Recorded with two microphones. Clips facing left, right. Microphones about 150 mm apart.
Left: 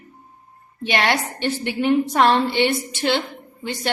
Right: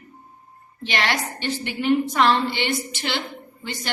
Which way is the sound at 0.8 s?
60° left (ahead or behind).